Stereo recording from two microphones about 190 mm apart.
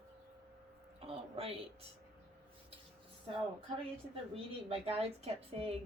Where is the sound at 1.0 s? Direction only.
30° right (ahead or behind).